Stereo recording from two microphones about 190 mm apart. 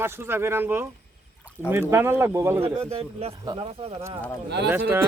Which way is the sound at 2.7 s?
30° right (ahead or behind).